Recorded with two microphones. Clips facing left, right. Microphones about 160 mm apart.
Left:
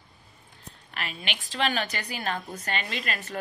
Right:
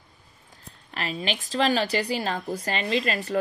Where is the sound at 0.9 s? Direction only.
35° right (ahead or behind).